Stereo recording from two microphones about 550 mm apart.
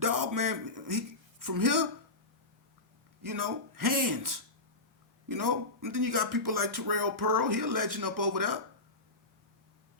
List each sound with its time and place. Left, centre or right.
0.0 s a man's voice: right
3.2 s speech: right